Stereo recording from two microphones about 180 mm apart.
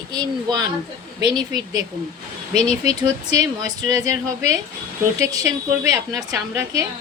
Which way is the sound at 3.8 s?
20° right (ahead or behind).